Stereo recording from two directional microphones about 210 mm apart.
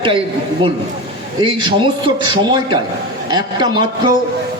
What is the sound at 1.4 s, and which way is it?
A man's voice, 25° right (ahead or behind).